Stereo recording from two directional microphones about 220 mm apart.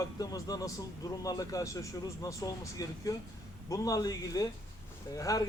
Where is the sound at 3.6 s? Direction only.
15° left (ahead or behind).